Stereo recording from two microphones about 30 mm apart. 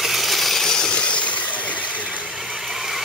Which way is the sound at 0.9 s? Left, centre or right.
Left.